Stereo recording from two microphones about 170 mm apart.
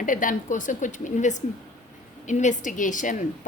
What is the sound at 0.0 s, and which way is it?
A woman's voice, 50° left (ahead or behind).